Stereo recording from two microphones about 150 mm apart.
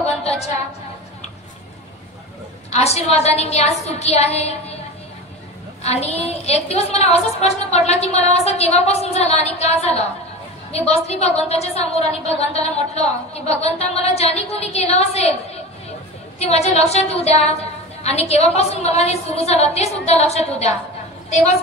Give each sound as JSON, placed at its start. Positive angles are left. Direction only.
{"t": 0.0, "sound": "a sound", "side_deg": 45}
{"t": 2.7, "sound": "a woman's voice", "side_deg": 45}
{"t": 5.8, "sound": "a woman's voice", "side_deg": 45}
{"t": 16.3, "sound": "a woman's voice", "side_deg": 45}